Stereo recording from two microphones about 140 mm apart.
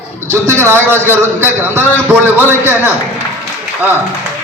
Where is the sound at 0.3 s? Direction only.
15° right (ahead or behind).